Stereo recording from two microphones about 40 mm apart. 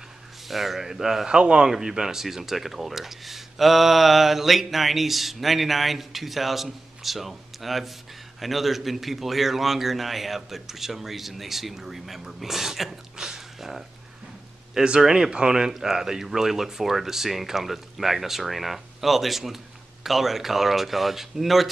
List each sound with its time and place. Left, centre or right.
0.5 s a man's voice: centre